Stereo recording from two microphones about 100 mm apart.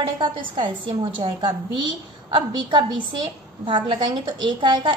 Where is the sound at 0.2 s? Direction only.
55° right (ahead or behind).